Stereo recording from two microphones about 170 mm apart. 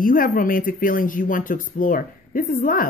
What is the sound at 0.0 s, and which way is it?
Speech, 55° left (ahead or behind).